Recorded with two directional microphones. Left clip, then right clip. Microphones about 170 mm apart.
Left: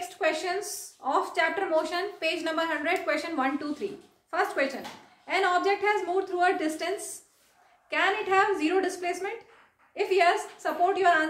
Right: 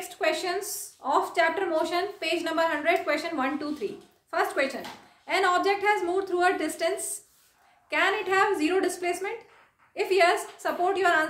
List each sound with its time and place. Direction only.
0.2 s a woman's voice: 20° right (ahead or behind)